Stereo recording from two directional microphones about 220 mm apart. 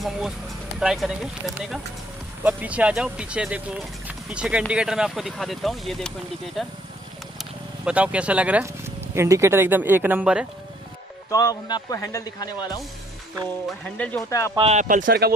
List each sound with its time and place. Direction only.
0.7 s speech: centre (ahead or behind)
11.2 s speech: 15° left (ahead or behind)
13.7 s speech: 5° left (ahead or behind)
14.5 s speech: 25° right (ahead or behind); by 15.3 s 45° right (ahead or behind)